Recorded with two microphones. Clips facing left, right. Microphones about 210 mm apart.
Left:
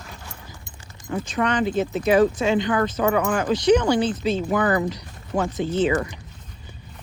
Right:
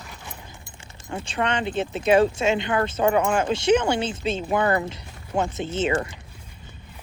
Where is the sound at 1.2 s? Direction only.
25° right (ahead or behind).